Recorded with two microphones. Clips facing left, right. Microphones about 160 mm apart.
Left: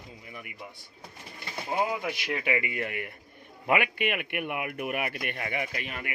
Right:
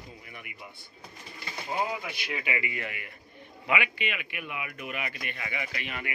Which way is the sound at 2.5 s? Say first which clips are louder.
Left 5 dB; 50° left (ahead or behind).